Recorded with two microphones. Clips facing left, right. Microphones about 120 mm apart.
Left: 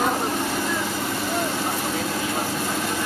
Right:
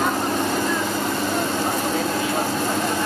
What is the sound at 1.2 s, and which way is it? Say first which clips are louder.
Vehicle: right 2 dB; 10° left (ahead or behind).